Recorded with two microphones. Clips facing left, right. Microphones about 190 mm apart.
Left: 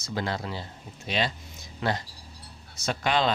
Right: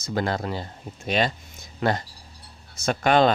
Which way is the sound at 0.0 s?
50° right (ahead or behind).